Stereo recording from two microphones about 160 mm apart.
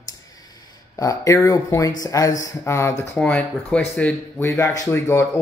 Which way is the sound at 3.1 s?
5° left (ahead or behind).